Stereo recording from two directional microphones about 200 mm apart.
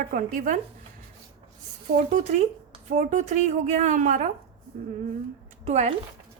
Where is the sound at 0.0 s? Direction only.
45° right (ahead or behind).